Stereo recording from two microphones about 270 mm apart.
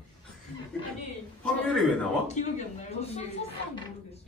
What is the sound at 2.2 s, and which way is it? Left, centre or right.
Speech, left.